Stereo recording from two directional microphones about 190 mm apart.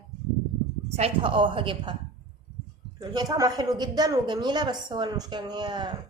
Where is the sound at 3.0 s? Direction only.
20° right (ahead or behind).